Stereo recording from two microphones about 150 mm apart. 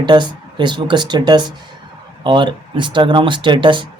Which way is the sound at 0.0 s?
30° right (ahead or behind).